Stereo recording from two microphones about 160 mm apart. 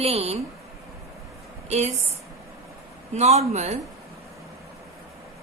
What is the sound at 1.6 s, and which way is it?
Speech, 45° right (ahead or behind).